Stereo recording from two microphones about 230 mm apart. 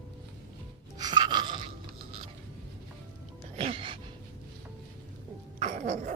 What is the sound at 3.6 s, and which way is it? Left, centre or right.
Music, right.